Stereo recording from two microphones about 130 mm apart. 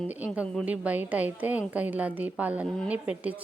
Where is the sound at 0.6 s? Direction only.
10° right (ahead or behind).